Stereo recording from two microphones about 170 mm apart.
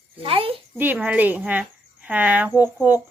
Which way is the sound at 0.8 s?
10° right (ahead or behind).